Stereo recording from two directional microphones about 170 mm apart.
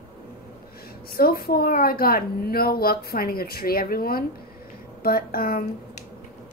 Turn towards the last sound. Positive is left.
turn(degrees=60)  # may be behind; listen again after turning